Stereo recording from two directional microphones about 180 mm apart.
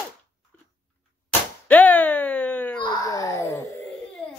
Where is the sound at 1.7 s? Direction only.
10° left (ahead or behind).